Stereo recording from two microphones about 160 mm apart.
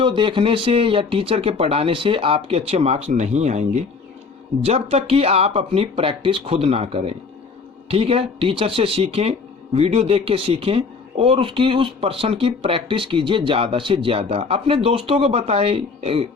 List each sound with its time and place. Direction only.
0.0 s speech: 30° right (ahead or behind)